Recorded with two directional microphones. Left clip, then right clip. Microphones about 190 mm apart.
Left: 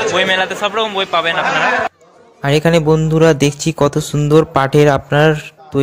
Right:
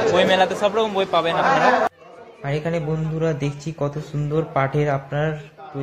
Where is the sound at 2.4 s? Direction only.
60° left (ahead or behind).